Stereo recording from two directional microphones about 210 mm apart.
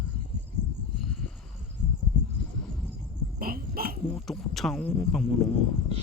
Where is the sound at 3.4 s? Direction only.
45° right (ahead or behind).